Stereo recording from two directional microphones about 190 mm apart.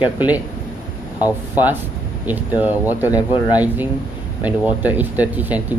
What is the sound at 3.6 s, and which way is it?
Speech, 10° right (ahead or behind).